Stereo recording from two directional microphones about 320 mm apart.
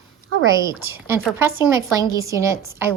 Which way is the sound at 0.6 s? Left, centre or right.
Centre.